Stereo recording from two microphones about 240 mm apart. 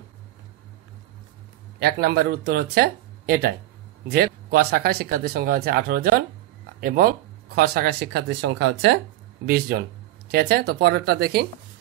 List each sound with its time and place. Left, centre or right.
1.8 s speech: right